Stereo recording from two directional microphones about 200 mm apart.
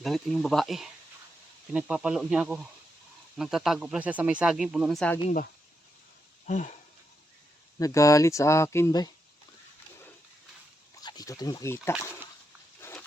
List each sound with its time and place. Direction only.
0.0 s speech: centre (ahead or behind)
6.5 s a sound: 40° left (ahead or behind)
7.8 s speech: 15° left (ahead or behind)
10.9 s speech: 15° left (ahead or behind)
12.8 s pig: 10° left (ahead or behind)